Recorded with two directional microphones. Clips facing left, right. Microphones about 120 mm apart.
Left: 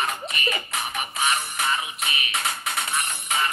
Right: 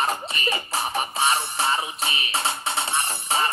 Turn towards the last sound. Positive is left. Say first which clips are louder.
# right 2 dB
turn(degrees=-35)  # may be behind; listen again after turning